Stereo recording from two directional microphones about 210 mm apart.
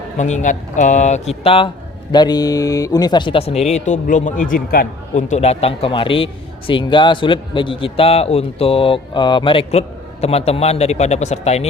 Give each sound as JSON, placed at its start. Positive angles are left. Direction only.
{"t": 0.2, "sound": "speech", "side_deg": 35}